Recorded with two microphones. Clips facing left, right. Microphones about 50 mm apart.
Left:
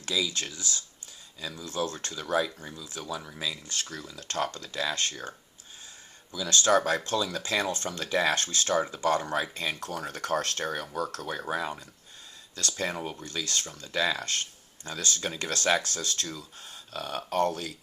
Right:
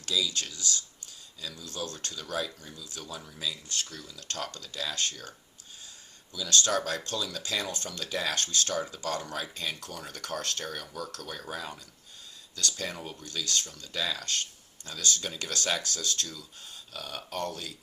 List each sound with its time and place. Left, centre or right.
0.0 s speech: left
3.1 s speech: left
6.3 s speech: left